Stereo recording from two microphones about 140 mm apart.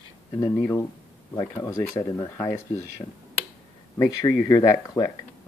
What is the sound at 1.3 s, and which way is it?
Speech, 25° left (ahead or behind).